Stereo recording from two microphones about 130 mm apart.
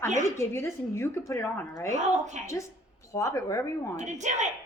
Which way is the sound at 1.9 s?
65° right (ahead or behind).